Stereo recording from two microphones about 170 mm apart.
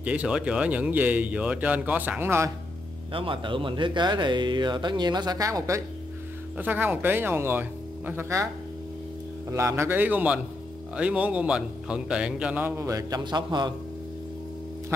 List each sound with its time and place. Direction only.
0.0 s a man's voice: 5° right (ahead or behind)
3.1 s a man's voice: 30° right (ahead or behind); by 8.5 s 15° right (ahead or behind)
9.5 s a man's voice: 15° right (ahead or behind)